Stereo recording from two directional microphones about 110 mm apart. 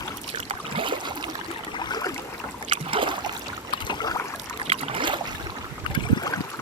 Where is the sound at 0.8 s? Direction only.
45° right (ahead or behind).